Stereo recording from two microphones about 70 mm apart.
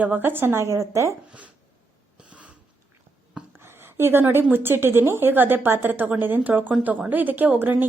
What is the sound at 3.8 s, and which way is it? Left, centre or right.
A woman's voice, right.